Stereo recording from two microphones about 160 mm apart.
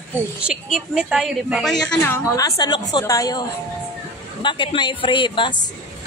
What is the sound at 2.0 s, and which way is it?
A woman's voice, 20° left (ahead or behind).